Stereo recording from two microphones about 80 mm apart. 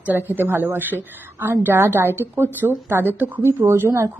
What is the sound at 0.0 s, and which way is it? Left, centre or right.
A woman's voice, right.